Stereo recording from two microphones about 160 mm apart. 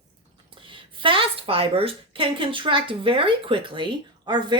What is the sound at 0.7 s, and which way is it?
A woman's voice, 30° right (ahead or behind).